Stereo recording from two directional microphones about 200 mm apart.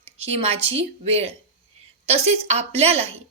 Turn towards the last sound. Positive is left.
turn(degrees=-30)  # may be behind; listen again after turning